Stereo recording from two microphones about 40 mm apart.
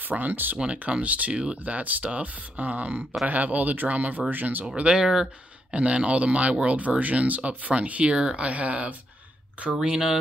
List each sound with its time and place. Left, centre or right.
0.0 s speech: right
0.6 s speech: right
4.7 s speech: right
8.1 s speech: right